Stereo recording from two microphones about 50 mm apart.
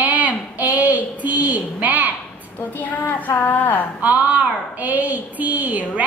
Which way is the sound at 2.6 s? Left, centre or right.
Left.